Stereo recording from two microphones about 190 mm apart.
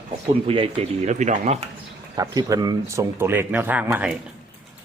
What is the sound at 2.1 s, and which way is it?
Speech, 20° right (ahead or behind).